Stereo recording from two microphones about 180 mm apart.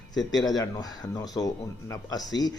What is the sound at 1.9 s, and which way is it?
Speech, 20° left (ahead or behind).